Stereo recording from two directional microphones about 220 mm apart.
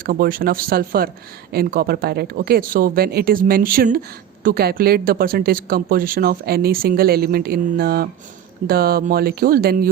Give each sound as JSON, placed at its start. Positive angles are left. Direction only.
{"t": 0.0, "sound": "speech", "side_deg": -40}